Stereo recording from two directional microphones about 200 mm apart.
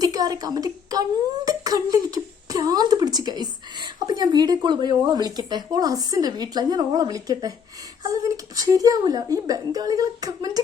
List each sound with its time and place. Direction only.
0.0 s a woman's voice: 20° right (ahead or behind)